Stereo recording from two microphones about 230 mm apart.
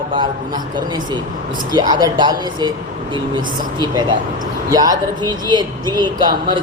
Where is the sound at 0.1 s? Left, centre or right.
Centre.